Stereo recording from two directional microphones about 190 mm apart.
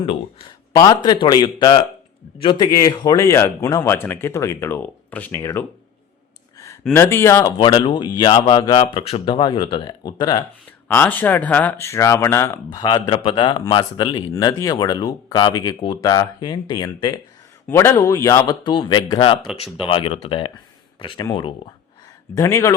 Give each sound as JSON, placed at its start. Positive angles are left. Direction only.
{"t": 0.0, "sound": "speech", "side_deg": 30}
{"t": 6.9, "sound": "speech", "side_deg": 15}
{"t": 10.8, "sound": "speech", "side_deg": 10}
{"t": 22.4, "sound": "speech", "side_deg": 15}